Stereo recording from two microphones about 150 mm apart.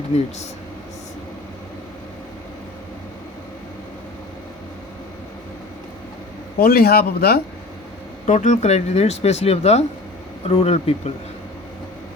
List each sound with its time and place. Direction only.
6.6 s speech: 90° left
8.3 s speech: 55° left (ahead or behind)